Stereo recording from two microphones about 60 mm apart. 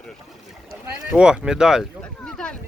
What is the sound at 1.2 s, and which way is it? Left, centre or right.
Speech, centre.